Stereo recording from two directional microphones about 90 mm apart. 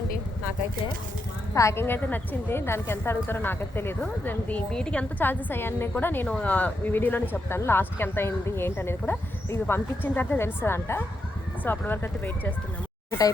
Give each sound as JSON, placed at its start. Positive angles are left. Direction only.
{"t": 1.5, "sound": "speech", "side_deg": 30}
{"t": 5.2, "sound": "speech", "side_deg": 20}